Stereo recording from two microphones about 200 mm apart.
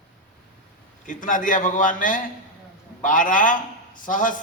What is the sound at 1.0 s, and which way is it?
A man's voice, 40° left (ahead or behind).